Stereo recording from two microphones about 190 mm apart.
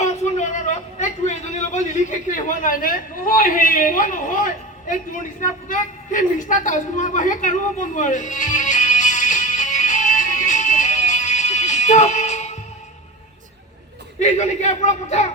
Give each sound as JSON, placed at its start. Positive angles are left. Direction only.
{"t": 0.0, "sound": "a man's voice", "side_deg": 35}
{"t": 5.6, "sound": "a sound", "side_deg": 45}
{"t": 14.2, "sound": "speech", "side_deg": 40}